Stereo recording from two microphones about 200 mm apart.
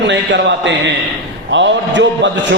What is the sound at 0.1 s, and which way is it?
A man's voice, 65° right (ahead or behind).